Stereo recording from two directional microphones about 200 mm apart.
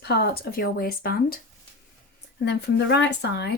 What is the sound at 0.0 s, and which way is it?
Speech, 55° left (ahead or behind).